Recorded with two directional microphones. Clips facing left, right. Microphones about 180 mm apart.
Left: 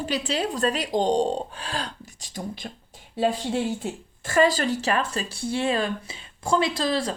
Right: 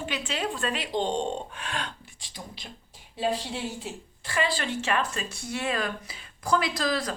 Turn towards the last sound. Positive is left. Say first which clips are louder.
# left 4 dB
turn(degrees=30)  # may be behind; listen again after turning